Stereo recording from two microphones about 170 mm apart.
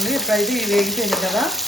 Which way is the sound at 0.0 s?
Centre (ahead or behind).